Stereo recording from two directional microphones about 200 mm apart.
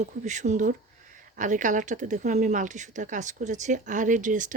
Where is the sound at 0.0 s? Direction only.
35° right (ahead or behind).